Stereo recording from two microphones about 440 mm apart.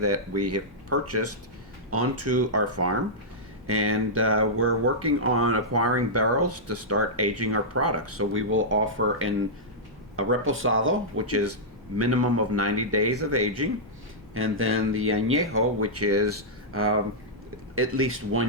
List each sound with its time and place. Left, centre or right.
0.0 s speech: right